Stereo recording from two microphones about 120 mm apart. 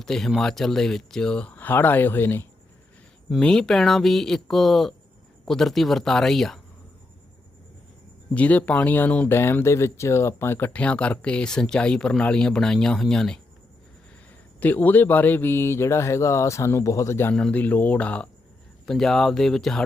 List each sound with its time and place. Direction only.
0.0 s speech: 5° left (ahead or behind)
3.4 s speech: 5° left (ahead or behind)
8.3 s speech: 10° left (ahead or behind)
14.6 s speech: 15° left (ahead or behind)
17.3 s speech: 10° left (ahead or behind)